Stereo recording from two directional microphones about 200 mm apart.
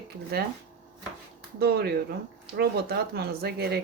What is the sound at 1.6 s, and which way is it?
Speech, 55° right (ahead or behind).